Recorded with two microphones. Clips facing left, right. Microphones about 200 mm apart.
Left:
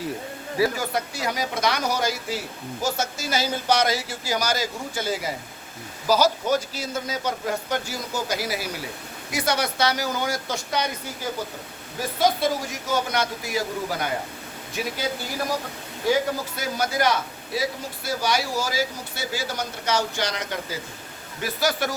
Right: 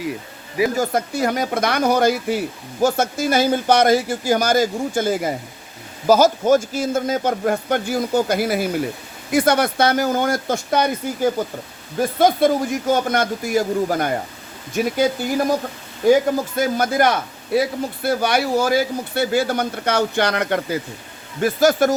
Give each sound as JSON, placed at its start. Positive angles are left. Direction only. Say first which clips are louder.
{"t": 0.8, "sound": "a man's voice", "louder": "right 8 dB", "side_deg": -50}
{"t": 16.0, "sound": "speech", "louder": "right 8 dB", "side_deg": -50}
{"t": 21.4, "sound": "a man's voice", "louder": "right 10 dB", "side_deg": -50}